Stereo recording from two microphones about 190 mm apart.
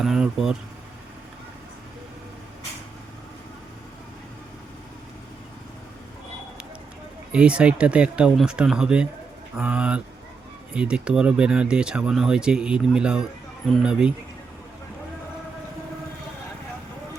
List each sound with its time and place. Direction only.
0.0 s speech: centre (ahead or behind)
7.3 s speech: 5° right (ahead or behind)